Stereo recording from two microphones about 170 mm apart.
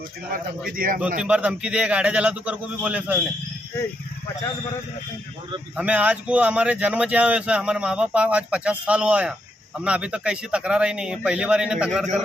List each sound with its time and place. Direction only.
0.8 s a man's voice: 55° right (ahead or behind)
1.2 s speech: 5° right (ahead or behind)
5.7 s a man's voice: 10° right (ahead or behind)